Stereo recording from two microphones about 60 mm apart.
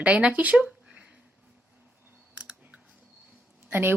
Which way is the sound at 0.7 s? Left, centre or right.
Centre.